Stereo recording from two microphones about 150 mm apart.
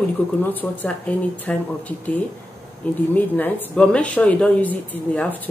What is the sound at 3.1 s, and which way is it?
Speech, 10° left (ahead or behind).